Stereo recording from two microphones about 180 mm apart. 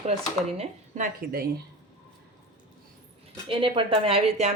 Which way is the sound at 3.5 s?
30° right (ahead or behind).